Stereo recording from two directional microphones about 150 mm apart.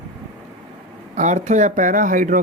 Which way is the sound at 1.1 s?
55° right (ahead or behind).